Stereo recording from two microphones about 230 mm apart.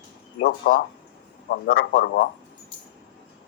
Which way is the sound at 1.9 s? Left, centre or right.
Left.